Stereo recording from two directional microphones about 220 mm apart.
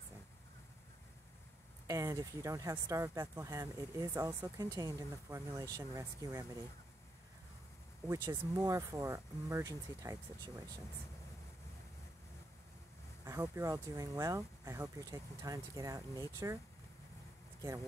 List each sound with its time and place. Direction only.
1.9 s speech: 15° right (ahead or behind)
8.1 s speech: 15° right (ahead or behind)
13.2 s speech: 15° right (ahead or behind)